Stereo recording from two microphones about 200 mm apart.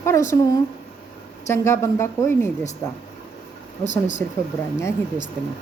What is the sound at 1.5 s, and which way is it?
Speech, 15° left (ahead or behind).